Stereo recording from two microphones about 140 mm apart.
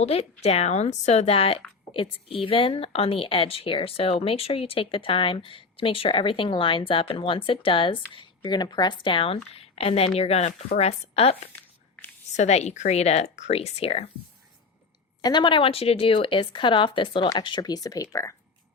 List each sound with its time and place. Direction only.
0.0 s a woman's voice: 50° left (ahead or behind)
11.5 s a sound: 15° left (ahead or behind)
12.4 s speech: 50° left (ahead or behind)
15.2 s a woman's voice: 30° left (ahead or behind)